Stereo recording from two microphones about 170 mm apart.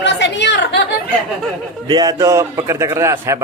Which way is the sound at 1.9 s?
20° right (ahead or behind).